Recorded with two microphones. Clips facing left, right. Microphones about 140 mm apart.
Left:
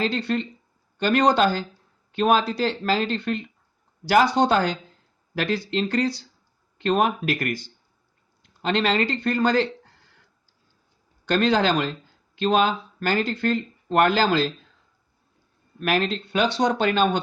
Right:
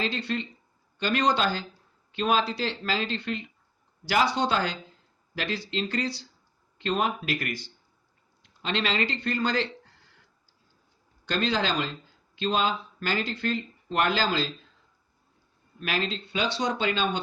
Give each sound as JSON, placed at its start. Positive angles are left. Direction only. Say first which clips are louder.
{"t": 0.0, "sound": "speech", "louder": "left 5 dB", "side_deg": 50}
{"t": 11.3, "sound": "speech", "louder": "left 7 dB", "side_deg": 55}
{"t": 15.8, "sound": "speech", "louder": "left 7 dB", "side_deg": 55}